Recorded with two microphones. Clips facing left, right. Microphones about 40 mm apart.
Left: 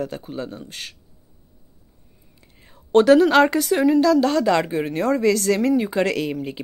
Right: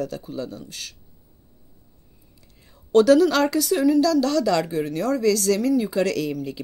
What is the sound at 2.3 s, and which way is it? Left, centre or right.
A woman's voice, left.